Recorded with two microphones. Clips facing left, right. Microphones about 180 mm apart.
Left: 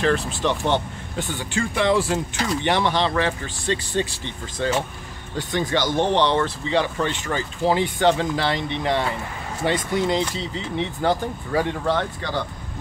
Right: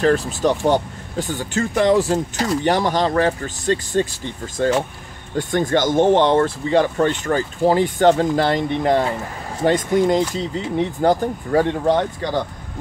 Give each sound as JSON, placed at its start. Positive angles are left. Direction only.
{"t": 0.0, "sound": "speech", "side_deg": -40}
{"t": 11.9, "sound": "speech", "side_deg": -15}